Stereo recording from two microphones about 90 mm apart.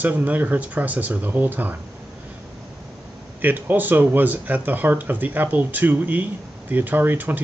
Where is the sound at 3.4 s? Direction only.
20° right (ahead or behind).